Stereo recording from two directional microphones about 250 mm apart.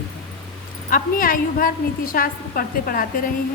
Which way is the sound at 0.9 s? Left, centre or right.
Left.